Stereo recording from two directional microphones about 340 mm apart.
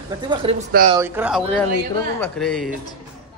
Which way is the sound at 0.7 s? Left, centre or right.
Right.